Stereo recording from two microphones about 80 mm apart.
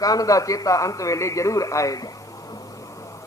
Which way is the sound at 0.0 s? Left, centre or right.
Left.